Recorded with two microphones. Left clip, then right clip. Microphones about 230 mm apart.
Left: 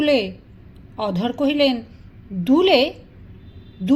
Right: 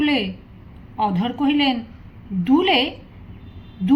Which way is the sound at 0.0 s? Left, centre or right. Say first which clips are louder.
Left 3 dB; left.